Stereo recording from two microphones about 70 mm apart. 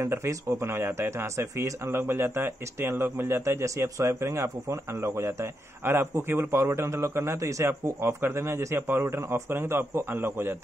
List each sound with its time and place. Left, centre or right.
0.0 s a man's voice: right